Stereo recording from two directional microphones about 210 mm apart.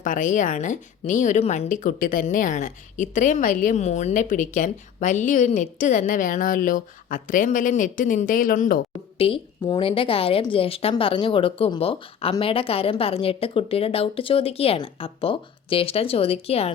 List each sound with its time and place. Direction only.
0.0 s a woman's voice: 40° left (ahead or behind)